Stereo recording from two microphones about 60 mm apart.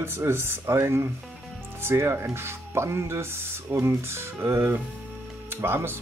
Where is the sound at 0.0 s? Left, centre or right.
Right.